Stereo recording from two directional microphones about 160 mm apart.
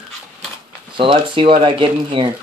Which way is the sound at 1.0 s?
30° right (ahead or behind).